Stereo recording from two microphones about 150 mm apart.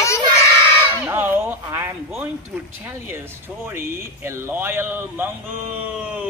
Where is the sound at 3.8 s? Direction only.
15° right (ahead or behind).